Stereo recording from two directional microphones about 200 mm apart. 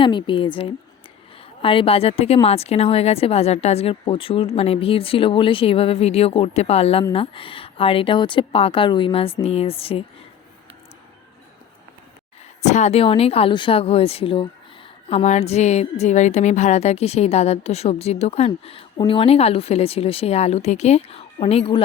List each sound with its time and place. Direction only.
0.0 s speech: 25° left (ahead or behind)
12.6 s speech: 35° left (ahead or behind)